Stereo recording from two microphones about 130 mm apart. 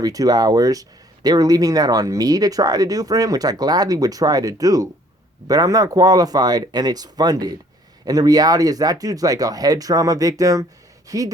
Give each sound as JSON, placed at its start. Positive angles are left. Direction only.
{"t": 0.0, "sound": "speech", "side_deg": -30}